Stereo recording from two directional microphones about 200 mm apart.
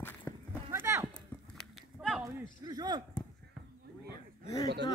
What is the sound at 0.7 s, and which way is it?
Clip-clop, 15° right (ahead or behind).